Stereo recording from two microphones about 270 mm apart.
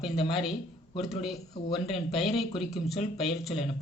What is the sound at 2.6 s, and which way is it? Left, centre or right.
Speech, centre.